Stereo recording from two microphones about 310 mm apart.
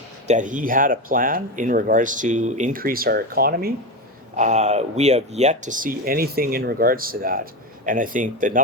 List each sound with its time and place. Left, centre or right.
0.3 s speech: right